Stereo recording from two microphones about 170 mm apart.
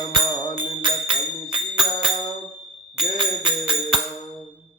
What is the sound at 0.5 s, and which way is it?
Music, 30° right (ahead or behind).